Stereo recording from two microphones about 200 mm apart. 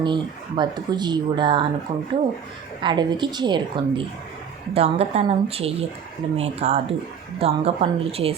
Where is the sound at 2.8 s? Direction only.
20° right (ahead or behind).